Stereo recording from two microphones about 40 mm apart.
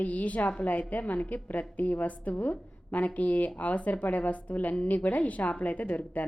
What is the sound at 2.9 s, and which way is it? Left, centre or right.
A woman's voice, left.